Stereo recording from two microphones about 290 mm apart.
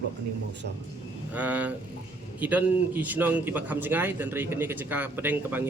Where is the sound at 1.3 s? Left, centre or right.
Centre.